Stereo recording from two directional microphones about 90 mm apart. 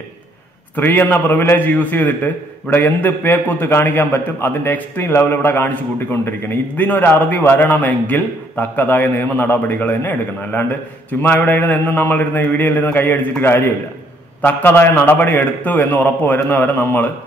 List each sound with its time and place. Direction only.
0.7 s a man's voice: 20° left (ahead or behind)